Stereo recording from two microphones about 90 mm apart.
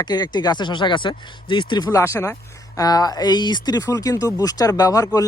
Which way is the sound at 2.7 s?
45° left (ahead or behind).